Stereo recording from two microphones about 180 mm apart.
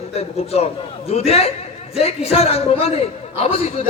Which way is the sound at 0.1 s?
35° left (ahead or behind).